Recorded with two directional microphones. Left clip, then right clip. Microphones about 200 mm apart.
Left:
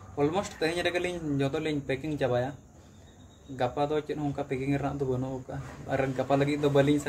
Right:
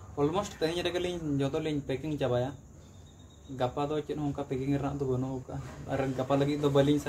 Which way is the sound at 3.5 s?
5° left (ahead or behind).